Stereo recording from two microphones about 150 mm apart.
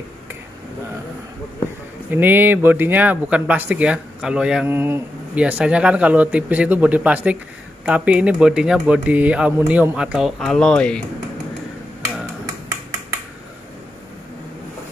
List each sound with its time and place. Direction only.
2.0 s speech: 15° right (ahead or behind)
10.4 s speech: 5° left (ahead or behind)